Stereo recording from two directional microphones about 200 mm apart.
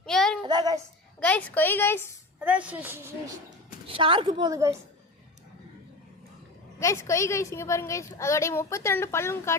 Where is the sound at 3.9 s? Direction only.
25° right (ahead or behind).